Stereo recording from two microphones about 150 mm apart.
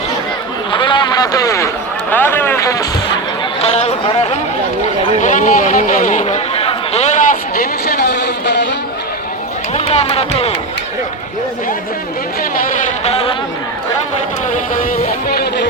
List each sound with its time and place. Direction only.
0.7 s a sound: 30° left (ahead or behind)
3.6 s speech: 45° left (ahead or behind)
5.2 s chatter: 55° left (ahead or behind); by 8.3 s 90° left
9.7 s speech: 45° left (ahead or behind)
13.1 s chatter: 45° left (ahead or behind)